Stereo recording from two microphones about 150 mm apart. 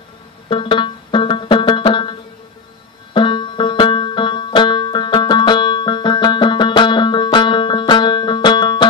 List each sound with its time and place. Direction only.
0.5 s music: 35° left (ahead or behind)
3.1 s banjo: 35° left (ahead or behind)